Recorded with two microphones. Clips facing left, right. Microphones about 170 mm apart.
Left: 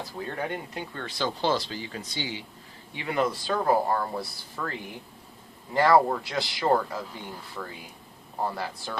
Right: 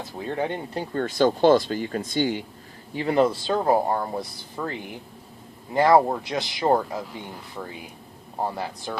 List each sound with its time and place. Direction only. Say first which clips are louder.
0.0 s speech: right 5 dB; 20° right (ahead or behind); by 2.4 s 50° right (ahead or behind)
2.9 s speech: right 6 dB; 35° right (ahead or behind); by 9.0 s 20° right (ahead or behind)